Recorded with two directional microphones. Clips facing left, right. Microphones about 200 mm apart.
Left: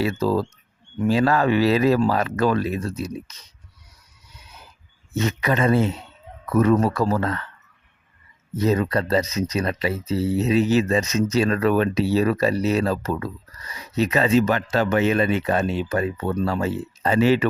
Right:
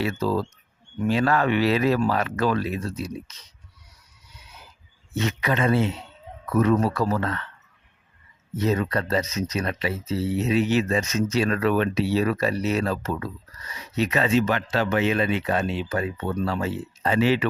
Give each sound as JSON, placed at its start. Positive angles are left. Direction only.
{"t": 0.0, "sound": "speech", "side_deg": 40}
{"t": 5.1, "sound": "speech", "side_deg": 45}
{"t": 8.5, "sound": "speech", "side_deg": 35}